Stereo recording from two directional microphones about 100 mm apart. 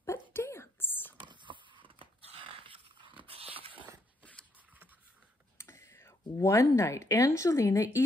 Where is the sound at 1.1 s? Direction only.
50° right (ahead or behind).